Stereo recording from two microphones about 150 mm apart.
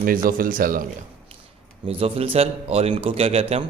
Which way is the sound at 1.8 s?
40° right (ahead or behind).